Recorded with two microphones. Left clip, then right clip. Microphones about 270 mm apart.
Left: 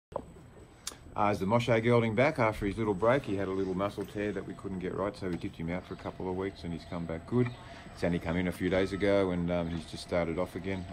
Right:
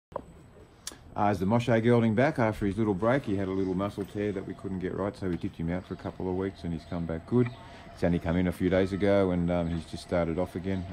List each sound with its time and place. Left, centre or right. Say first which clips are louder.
0.8 s speech: right 2 dB; right